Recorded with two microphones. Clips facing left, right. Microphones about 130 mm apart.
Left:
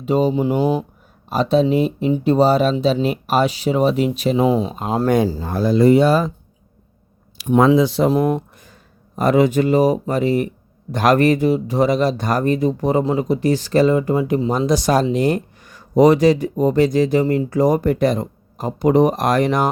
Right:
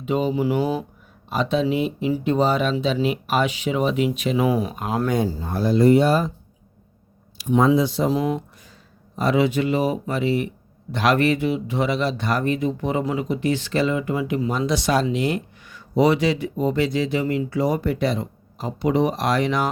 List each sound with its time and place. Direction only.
0.0 s speech: 35° left (ahead or behind)
5.1 s speech: 90° left
7.3 s speech: 65° left (ahead or behind); by 19.7 s 45° left (ahead or behind)